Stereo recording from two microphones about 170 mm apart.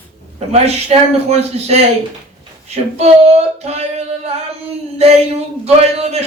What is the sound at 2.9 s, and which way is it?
A man's voice, 40° right (ahead or behind).